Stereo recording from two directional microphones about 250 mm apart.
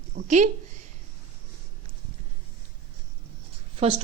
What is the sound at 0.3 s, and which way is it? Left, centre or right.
Speech, right.